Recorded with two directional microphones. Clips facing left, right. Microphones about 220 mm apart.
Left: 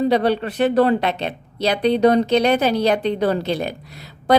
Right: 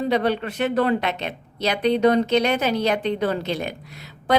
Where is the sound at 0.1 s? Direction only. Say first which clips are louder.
Left 3 dB; 35° left (ahead or behind).